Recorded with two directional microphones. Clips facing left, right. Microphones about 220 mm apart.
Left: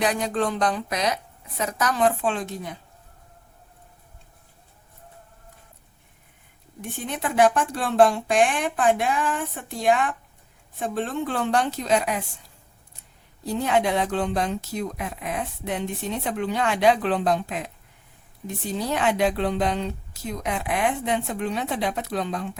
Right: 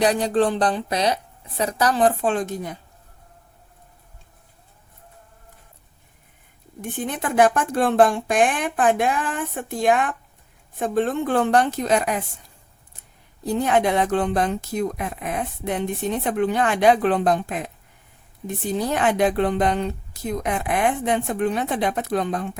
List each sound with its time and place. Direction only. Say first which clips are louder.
0.0 s a woman's voice: right 5 dB; 35° right (ahead or behind)
7.0 s a woman's voice: right 2 dB; 50° right (ahead or behind)
13.4 s a woman's voice: right 3 dB; 50° right (ahead or behind)
18.9 s a woman's voice: right 2 dB; 50° right (ahead or behind)